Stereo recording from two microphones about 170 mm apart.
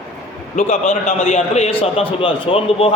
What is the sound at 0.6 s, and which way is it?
A man's voice, 45° left (ahead or behind).